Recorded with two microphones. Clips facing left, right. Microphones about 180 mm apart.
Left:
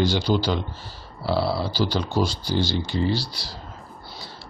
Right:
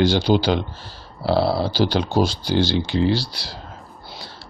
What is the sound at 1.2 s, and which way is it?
Speech, 60° right (ahead or behind).